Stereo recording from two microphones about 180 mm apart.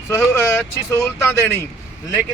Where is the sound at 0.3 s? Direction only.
15° left (ahead or behind).